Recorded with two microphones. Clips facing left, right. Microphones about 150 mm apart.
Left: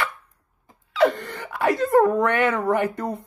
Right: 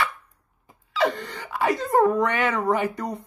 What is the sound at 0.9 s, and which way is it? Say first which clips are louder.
Speech: left 4 dB; 55° left (ahead or behind).